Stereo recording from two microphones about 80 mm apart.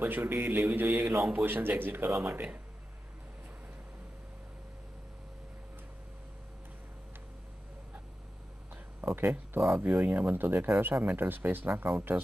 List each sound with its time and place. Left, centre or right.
0.0 s speech: right
9.0 s speech: right
9.8 s speech: right